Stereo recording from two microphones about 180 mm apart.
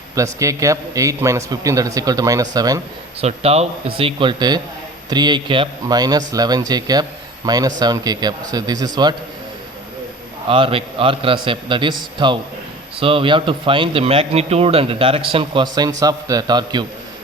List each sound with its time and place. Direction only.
0.2 s a man's voice: 20° right (ahead or behind)
3.2 s a man's voice: 35° right (ahead or behind)
10.5 s speech: 30° right (ahead or behind)